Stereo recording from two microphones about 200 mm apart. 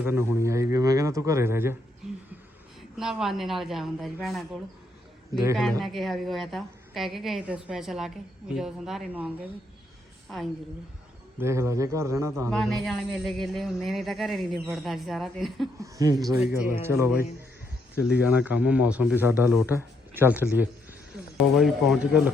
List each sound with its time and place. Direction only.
0.0 s a man's voice: 10° right (ahead or behind)
3.0 s speech: centre (ahead or behind)
5.8 s speech: centre (ahead or behind)
11.3 s a man's voice: 15° right (ahead or behind)
12.5 s speech: centre (ahead or behind)
15.8 s a man's voice: 15° right (ahead or behind)